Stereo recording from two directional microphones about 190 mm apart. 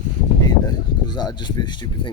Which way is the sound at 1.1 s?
20° left (ahead or behind).